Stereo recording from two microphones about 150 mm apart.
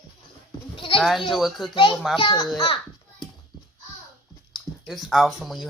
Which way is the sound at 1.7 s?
30° left (ahead or behind).